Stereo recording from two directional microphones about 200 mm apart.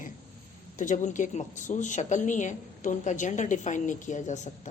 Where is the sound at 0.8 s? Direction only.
40° left (ahead or behind).